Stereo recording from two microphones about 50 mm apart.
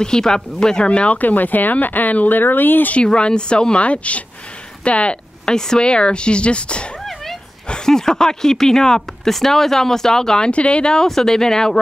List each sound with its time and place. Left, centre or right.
0.0 s speech: centre
0.8 s speech: left
1.2 s speech: left
3.1 s speech: centre
10.5 s speech: left